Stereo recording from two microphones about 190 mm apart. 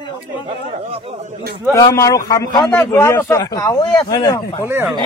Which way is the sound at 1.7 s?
15° left (ahead or behind).